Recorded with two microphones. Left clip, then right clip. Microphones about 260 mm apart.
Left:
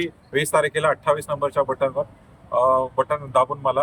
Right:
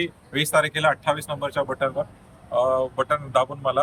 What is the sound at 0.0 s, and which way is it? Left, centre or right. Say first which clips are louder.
Speech: left 2 dB; centre.